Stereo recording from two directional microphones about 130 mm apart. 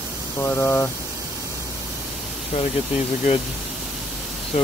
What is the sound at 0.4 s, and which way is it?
Speech, 15° left (ahead or behind).